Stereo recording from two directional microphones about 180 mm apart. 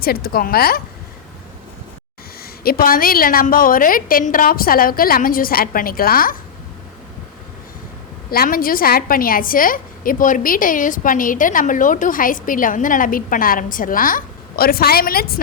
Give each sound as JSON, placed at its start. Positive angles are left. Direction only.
{"t": 0.0, "sound": "a woman's voice", "side_deg": 55}
{"t": 2.4, "sound": "a woman's voice", "side_deg": 55}
{"t": 8.3, "sound": "a woman's voice", "side_deg": 55}